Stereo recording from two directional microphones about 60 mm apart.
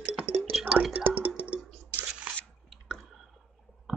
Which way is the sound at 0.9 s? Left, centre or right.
Right.